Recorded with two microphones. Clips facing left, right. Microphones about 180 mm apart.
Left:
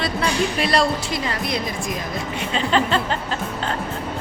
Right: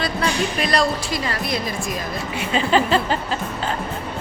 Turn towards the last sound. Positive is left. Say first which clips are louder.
# right 2 dB
turn(degrees=-5)  # may be behind; listen again after turning